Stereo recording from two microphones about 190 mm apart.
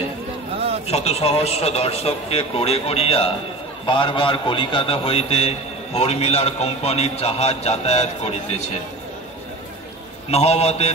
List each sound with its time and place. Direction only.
0.8 s a man's voice: 35° left (ahead or behind)
10.3 s a man's voice: 35° left (ahead or behind)